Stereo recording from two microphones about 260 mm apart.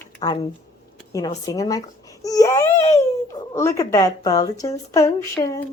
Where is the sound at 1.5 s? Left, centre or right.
Centre.